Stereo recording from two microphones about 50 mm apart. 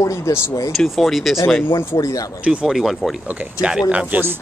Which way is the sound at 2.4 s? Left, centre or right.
Right.